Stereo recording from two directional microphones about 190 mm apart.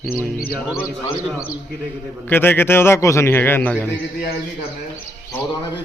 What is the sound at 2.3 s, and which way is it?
A man's voice, 10° left (ahead or behind).